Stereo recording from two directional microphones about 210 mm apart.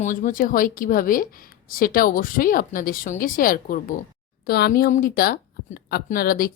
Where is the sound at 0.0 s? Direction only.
40° left (ahead or behind).